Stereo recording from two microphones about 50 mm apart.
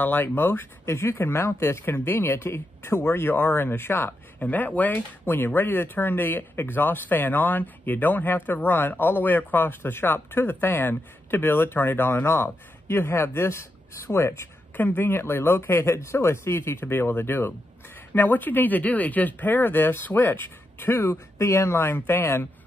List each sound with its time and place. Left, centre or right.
0.0 s speech: left
4.4 s speech: left
14.8 s speech: left
18.1 s speech: left
21.7 s speech: left